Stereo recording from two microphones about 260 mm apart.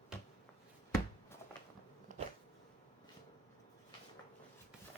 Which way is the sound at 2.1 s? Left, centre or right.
Right.